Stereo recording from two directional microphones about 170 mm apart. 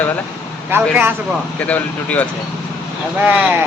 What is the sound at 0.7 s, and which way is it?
Speech, 10° right (ahead or behind).